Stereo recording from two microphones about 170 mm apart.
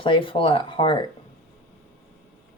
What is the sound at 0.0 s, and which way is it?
Speech, 30° left (ahead or behind).